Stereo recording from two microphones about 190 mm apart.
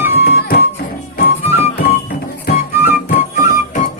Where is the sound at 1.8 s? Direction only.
50° left (ahead or behind).